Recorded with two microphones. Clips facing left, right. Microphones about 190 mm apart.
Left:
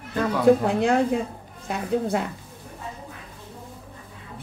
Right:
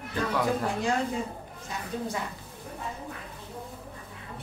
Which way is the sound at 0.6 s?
60° left (ahead or behind).